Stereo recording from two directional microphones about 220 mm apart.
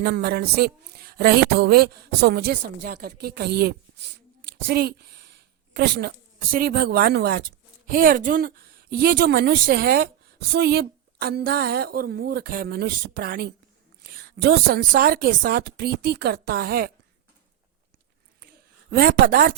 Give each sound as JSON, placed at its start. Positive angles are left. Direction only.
{"t": 0.0, "sound": "a woman's voice", "side_deg": -45}
{"t": 18.9, "sound": "a woman's voice", "side_deg": -40}